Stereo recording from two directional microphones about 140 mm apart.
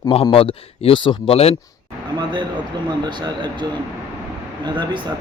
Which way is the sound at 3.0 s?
35° right (ahead or behind).